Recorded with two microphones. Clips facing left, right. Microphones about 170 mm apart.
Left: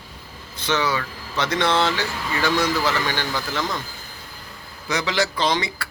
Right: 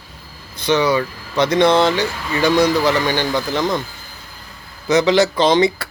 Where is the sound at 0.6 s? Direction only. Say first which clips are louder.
Right 7 dB; 15° right (ahead or behind).